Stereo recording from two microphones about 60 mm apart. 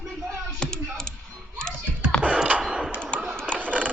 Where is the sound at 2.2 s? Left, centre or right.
Right.